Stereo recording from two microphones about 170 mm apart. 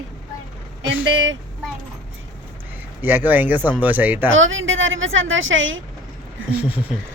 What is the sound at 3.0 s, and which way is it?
Speech, 10° right (ahead or behind).